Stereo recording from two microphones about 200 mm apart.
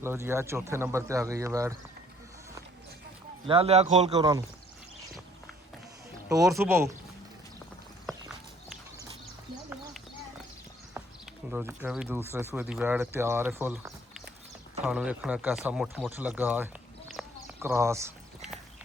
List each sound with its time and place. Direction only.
0.0 s speech: 10° right (ahead or behind)
3.4 s a man's voice: 25° right (ahead or behind)
4.2 s speech: 20° right (ahead or behind)
6.2 s speech: 15° right (ahead or behind)
11.0 s a sound: 10° right (ahead or behind)
11.5 s speech: 10° right (ahead or behind)
17.2 s a sound: centre (ahead or behind)
17.6 s speech: 15° right (ahead or behind)